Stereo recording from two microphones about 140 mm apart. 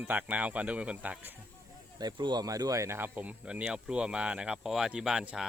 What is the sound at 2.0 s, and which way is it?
Speech, 30° right (ahead or behind).